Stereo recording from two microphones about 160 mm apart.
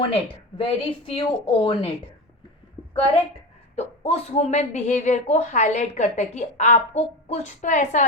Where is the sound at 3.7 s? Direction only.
40° left (ahead or behind).